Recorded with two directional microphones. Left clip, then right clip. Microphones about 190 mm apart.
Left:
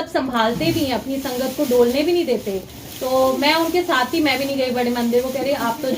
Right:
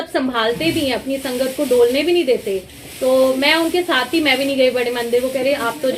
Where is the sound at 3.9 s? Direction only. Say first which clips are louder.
Right 4 dB; 40° right (ahead or behind).